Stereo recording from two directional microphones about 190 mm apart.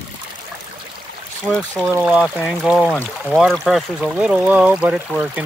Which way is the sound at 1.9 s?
10° right (ahead or behind).